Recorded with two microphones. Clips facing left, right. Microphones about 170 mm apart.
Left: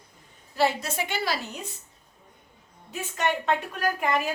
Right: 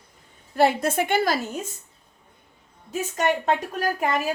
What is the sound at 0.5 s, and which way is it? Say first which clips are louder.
A woman's voice: right 5 dB; 55° right (ahead or behind).